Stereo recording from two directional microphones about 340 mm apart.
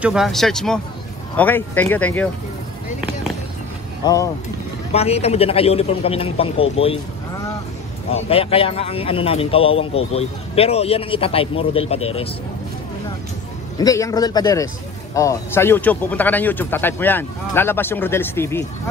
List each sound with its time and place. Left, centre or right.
0.0 s speech: centre
4.0 s a man's voice: centre
8.1 s a man's voice: centre
13.7 s a man's voice: centre